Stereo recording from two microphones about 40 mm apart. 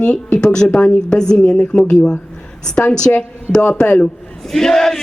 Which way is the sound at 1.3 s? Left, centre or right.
Left.